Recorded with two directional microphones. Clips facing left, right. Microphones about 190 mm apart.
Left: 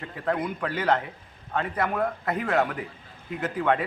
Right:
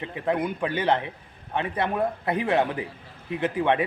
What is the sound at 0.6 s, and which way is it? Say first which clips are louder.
A man's voice: right 1 dB; 25° right (ahead or behind).